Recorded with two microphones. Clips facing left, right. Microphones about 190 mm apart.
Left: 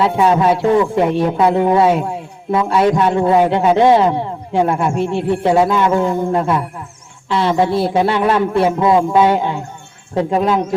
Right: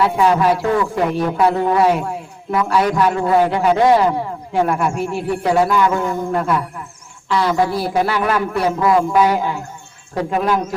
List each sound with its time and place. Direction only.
0.0 s a man's voice: 25° left (ahead or behind)